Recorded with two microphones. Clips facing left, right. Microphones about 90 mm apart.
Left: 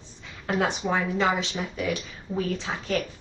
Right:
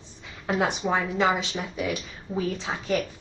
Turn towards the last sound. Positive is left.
turn(degrees=-15)  # may be behind; listen again after turning